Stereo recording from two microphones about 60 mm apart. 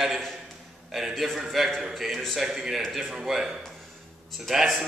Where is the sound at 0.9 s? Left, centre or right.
Centre.